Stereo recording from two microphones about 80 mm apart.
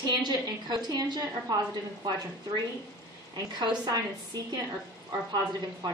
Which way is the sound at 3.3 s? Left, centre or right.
Right.